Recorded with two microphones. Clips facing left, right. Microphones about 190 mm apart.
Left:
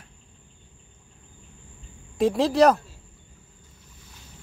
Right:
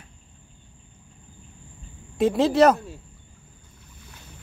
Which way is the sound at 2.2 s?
Centre (ahead or behind).